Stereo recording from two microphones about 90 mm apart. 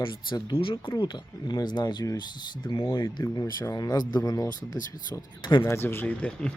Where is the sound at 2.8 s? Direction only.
30° left (ahead or behind).